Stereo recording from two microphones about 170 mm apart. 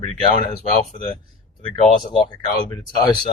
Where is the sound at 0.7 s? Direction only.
45° left (ahead or behind).